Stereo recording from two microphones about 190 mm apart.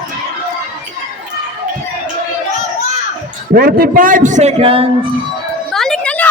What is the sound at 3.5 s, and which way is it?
A man's voice, 50° right (ahead or behind).